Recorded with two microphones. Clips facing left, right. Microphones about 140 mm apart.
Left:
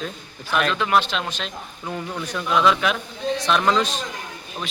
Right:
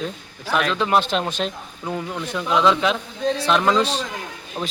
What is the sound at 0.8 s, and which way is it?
Speech, 35° right (ahead or behind).